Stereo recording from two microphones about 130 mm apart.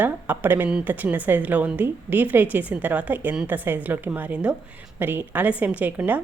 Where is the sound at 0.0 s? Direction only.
15° right (ahead or behind).